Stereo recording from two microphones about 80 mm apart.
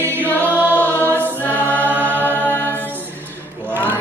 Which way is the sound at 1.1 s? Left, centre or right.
Left.